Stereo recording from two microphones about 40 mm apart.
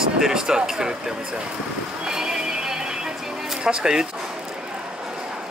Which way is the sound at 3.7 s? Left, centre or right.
Centre.